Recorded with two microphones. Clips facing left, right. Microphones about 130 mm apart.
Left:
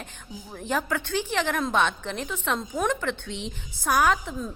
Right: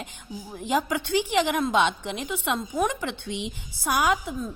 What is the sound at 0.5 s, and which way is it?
A woman's voice, 15° right (ahead or behind).